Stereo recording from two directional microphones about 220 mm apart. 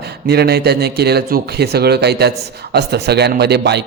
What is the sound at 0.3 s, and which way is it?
Speech, 45° right (ahead or behind).